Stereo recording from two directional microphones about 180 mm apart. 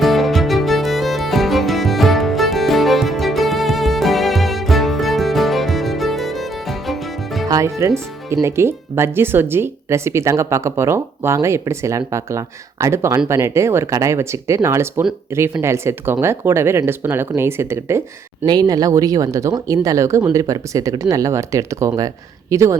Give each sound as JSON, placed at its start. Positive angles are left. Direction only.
{"t": 0.0, "sound": "music", "side_deg": 0}
{"t": 7.4, "sound": "speech", "side_deg": -15}